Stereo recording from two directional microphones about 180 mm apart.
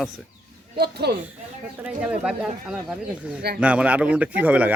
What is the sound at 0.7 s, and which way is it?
Speech, 60° right (ahead or behind).